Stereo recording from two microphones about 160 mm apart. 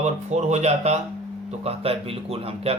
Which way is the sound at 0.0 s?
45° right (ahead or behind).